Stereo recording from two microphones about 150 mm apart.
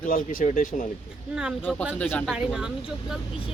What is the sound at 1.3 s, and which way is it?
Speech, 5° right (ahead or behind).